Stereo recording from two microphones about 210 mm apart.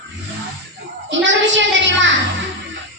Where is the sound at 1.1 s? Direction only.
60° right (ahead or behind).